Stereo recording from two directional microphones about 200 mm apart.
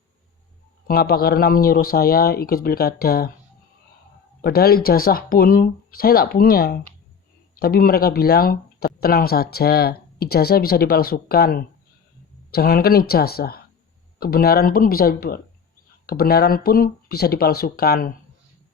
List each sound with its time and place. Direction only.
0.9 s speech: 50° left (ahead or behind)
4.4 s speech: 50° left (ahead or behind)